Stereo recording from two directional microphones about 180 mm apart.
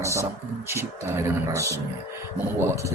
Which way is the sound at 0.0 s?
15° right (ahead or behind).